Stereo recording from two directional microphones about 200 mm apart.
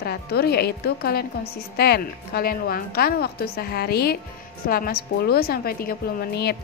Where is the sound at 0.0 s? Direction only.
50° left (ahead or behind).